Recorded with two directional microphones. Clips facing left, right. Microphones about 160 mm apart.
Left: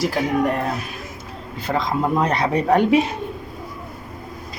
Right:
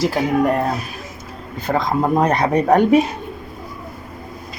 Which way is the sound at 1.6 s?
50° right (ahead or behind).